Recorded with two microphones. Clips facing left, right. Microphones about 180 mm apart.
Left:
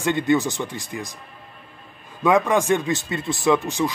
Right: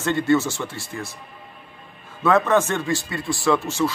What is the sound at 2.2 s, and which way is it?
Speech, 15° left (ahead or behind).